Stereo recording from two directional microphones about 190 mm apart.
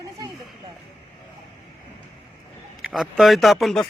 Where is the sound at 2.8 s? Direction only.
Centre (ahead or behind).